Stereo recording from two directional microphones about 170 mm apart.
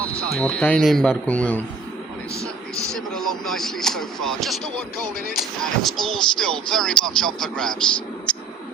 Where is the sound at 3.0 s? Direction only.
Centre (ahead or behind).